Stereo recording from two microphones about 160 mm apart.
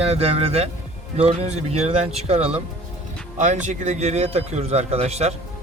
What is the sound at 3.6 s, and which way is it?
A man's voice, 50° right (ahead or behind).